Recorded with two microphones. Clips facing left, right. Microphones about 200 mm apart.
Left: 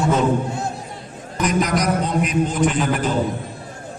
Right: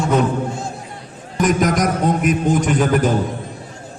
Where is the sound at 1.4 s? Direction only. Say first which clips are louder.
Right 3 dB; 45° right (ahead or behind).